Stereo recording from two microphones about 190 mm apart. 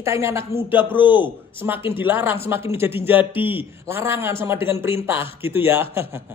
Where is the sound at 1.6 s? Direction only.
10° right (ahead or behind).